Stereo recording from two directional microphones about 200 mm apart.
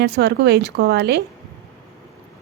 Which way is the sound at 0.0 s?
55° right (ahead or behind).